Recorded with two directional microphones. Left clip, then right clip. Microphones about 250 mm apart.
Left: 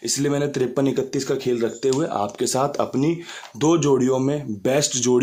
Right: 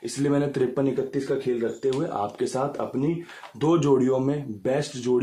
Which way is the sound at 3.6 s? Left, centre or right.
Centre.